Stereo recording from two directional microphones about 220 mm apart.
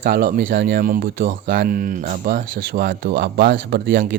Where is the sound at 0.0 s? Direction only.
40° right (ahead or behind).